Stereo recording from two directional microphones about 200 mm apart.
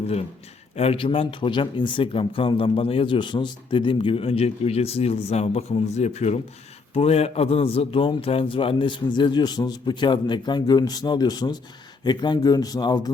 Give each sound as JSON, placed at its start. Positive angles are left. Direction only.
{"t": 0.8, "sound": "speech", "side_deg": 30}